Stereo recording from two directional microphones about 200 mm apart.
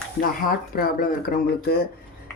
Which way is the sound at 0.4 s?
45° left (ahead or behind).